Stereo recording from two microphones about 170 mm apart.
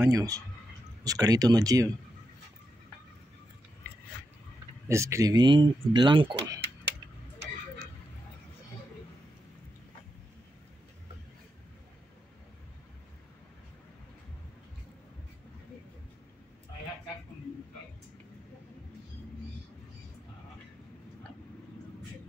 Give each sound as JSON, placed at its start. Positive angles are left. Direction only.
{"t": 0.0, "sound": "speech", "side_deg": -20}
{"t": 4.8, "sound": "speech", "side_deg": -15}